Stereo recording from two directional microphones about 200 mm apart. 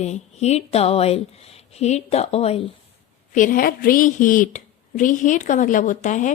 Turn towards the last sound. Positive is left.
turn(degrees=40)  # may be behind; listen again after turning